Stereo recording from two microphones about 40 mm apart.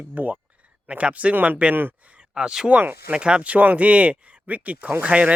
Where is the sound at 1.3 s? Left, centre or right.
Right.